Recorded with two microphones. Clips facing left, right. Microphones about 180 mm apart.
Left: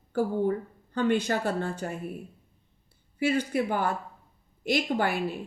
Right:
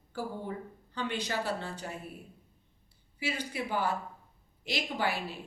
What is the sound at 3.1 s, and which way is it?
A woman's voice, 50° left (ahead or behind).